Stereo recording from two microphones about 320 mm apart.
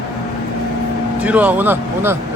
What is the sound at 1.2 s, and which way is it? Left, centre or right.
Speech, centre.